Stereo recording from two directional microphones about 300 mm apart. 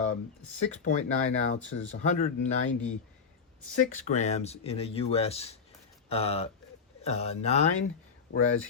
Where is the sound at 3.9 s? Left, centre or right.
Left.